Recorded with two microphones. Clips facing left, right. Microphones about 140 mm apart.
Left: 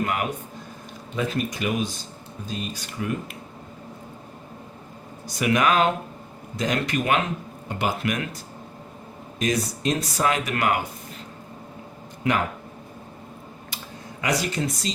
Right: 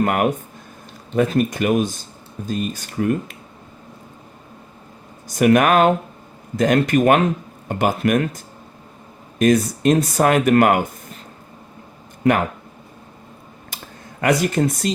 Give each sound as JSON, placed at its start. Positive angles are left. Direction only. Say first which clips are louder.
{"t": 0.0, "sound": "speech", "louder": "right 8 dB", "side_deg": -50}
{"t": 5.3, "sound": "speech", "louder": "right 7 dB", "side_deg": -50}
{"t": 9.4, "sound": "speech", "louder": "right 9 dB", "side_deg": -55}
{"t": 14.2, "sound": "speech", "louder": "right 8 dB", "side_deg": -55}